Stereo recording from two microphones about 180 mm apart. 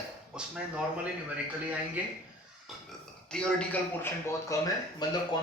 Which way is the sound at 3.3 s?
5° left (ahead or behind).